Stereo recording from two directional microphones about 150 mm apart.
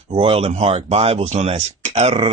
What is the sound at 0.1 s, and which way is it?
Speech, 40° right (ahead or behind).